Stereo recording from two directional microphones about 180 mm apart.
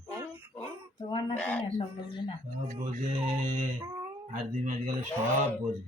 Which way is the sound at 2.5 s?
45° right (ahead or behind).